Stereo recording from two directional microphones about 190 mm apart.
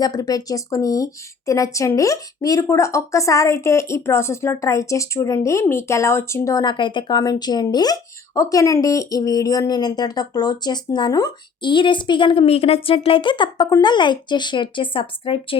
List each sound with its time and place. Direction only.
0.0 s speech: 20° left (ahead or behind)